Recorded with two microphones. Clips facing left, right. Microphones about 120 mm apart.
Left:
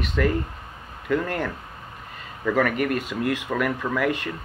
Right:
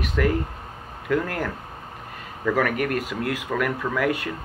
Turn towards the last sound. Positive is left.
turn(degrees=-5)  # may be behind; listen again after turning